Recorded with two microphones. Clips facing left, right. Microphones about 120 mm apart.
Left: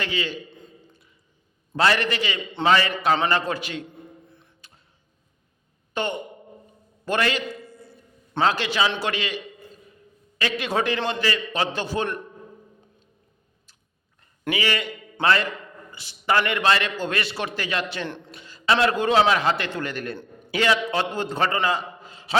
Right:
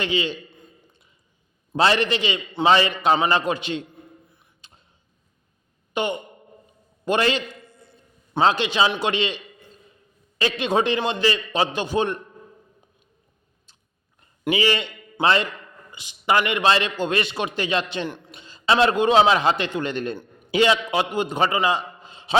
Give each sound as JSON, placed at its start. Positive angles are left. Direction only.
{"t": 0.0, "sound": "a man's voice", "side_deg": -20}
{"t": 1.7, "sound": "a man's voice", "side_deg": -20}
{"t": 4.3, "sound": "music", "side_deg": -10}
{"t": 5.9, "sound": "speech", "side_deg": -15}
{"t": 7.0, "sound": "a sound", "side_deg": -20}
{"t": 10.3, "sound": "a man's voice", "side_deg": -25}
{"t": 14.5, "sound": "a man's voice", "side_deg": -25}